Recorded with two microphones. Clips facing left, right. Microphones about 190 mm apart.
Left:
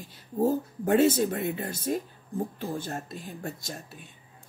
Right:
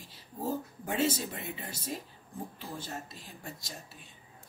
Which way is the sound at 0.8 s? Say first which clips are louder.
Left 10 dB; 55° left (ahead or behind).